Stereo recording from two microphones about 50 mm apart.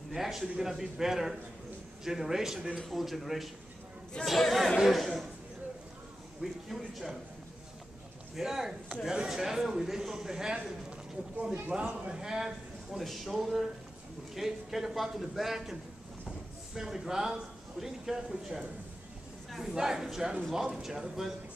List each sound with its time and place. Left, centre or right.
0.1 s a man's voice: centre
6.4 s speech: centre
8.4 s a man's voice: centre
11.7 s a man's voice: right
13.0 s a man's voice: centre